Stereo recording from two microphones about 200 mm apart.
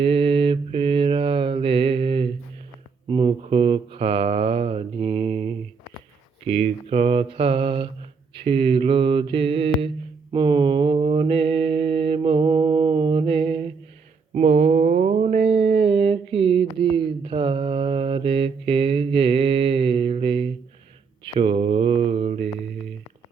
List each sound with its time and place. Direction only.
0.0 s mantra: 25° right (ahead or behind)